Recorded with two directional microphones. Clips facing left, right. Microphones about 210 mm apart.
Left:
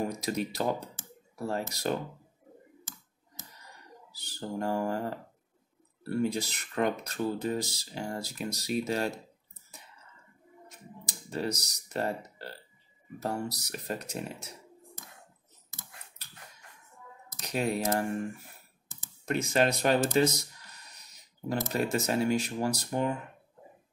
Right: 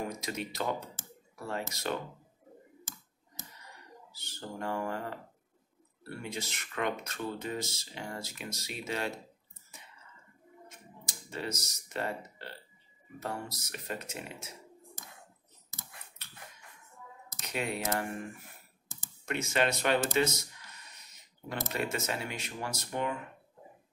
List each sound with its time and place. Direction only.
0.0 s speech: 35° left (ahead or behind)
4.1 s speech: 35° left (ahead or behind)
11.1 s speech: 35° left (ahead or behind)
13.6 s speech: 35° left (ahead or behind)
17.4 s speech: 40° left (ahead or behind)
19.2 s a sound: 35° left (ahead or behind)
21.7 s speech: 40° left (ahead or behind)